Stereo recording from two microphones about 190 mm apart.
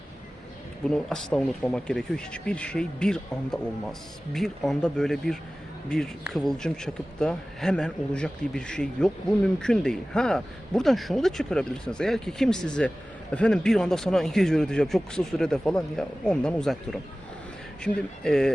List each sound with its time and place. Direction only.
0.9 s speech: 5° left (ahead or behind)